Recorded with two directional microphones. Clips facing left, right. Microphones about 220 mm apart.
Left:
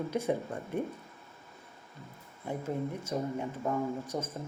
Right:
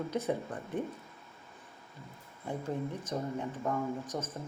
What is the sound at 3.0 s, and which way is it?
Speech, 10° left (ahead or behind).